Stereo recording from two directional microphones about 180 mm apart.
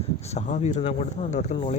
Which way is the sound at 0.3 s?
40° left (ahead or behind).